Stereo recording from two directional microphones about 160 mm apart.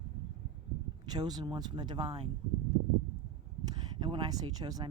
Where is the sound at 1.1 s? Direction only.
25° right (ahead or behind).